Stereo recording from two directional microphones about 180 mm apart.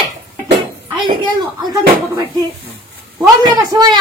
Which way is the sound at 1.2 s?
25° right (ahead or behind).